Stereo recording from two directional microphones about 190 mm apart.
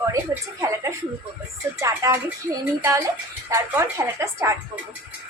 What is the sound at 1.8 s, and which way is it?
A woman's voice, 15° right (ahead or behind).